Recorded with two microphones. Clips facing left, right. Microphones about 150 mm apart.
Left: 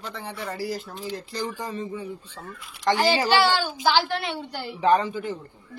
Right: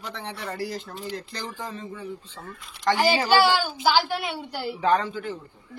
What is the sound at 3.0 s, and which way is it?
A woman's voice, 10° right (ahead or behind).